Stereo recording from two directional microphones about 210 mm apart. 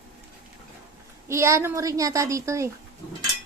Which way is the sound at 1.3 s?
15° right (ahead or behind).